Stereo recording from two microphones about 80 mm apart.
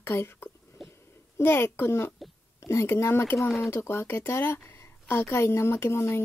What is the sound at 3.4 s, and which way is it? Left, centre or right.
Speech, centre.